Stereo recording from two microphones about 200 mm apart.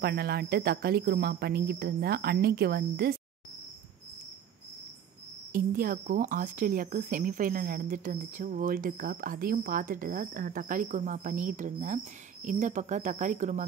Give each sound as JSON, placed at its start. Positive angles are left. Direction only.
{"t": 0.0, "sound": "speech", "side_deg": -55}
{"t": 5.5, "sound": "speech", "side_deg": -45}